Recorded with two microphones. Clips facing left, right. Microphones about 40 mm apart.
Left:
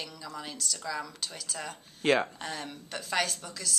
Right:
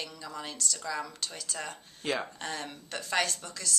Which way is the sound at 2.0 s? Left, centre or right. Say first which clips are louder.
Left 7 dB; left.